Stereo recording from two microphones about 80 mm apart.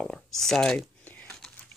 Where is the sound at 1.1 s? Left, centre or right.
Centre.